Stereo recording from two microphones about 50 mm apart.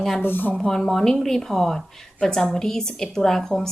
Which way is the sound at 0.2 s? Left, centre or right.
Left.